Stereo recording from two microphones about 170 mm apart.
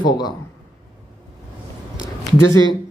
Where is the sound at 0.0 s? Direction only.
25° left (ahead or behind).